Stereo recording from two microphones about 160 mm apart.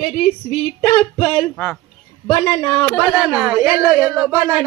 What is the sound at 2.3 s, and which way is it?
Speech, 15° left (ahead or behind).